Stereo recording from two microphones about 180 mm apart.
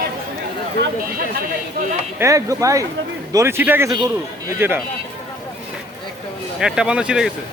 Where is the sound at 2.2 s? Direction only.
15° right (ahead or behind).